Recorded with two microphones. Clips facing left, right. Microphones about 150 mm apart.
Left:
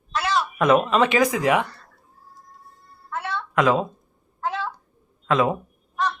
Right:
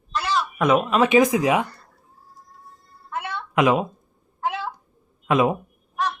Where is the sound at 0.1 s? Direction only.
Centre (ahead or behind).